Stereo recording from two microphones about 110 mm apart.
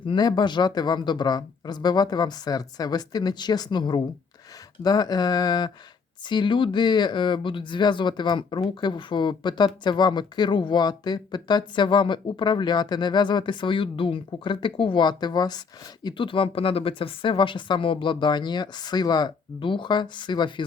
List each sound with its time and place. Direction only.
0.0 s speech: 45° left (ahead or behind)
16.0 s speech: 50° left (ahead or behind)